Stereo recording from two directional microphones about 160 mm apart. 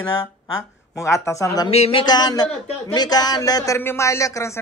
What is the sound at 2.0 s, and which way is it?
Speech, 25° left (ahead or behind).